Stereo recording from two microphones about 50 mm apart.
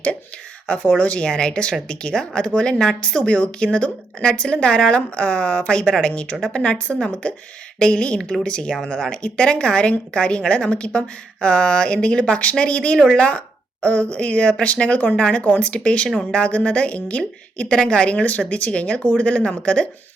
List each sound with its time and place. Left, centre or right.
0.9 s speech: left